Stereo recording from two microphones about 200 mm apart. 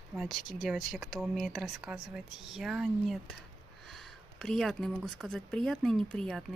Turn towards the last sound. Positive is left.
turn(degrees=0)  # may be behind; listen again after turning